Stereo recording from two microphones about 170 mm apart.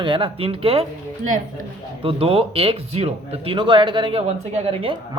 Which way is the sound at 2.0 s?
35° right (ahead or behind).